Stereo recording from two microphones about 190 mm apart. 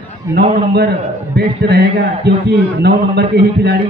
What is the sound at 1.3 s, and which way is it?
A man's voice, 60° right (ahead or behind).